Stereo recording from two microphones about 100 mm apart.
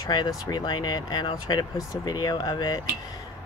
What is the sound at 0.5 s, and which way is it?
Speech, 50° left (ahead or behind).